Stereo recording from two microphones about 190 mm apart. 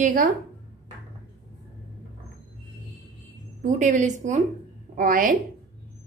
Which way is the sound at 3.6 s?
40° right (ahead or behind).